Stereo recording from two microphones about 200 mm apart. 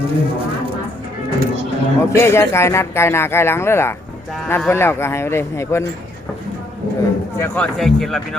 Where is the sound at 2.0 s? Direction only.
15° left (ahead or behind).